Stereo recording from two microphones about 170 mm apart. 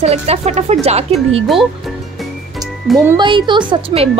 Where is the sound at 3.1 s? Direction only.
30° right (ahead or behind).